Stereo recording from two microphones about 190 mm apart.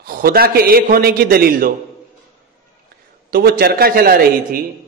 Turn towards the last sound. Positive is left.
turn(degrees=-50)  # may be behind; listen again after turning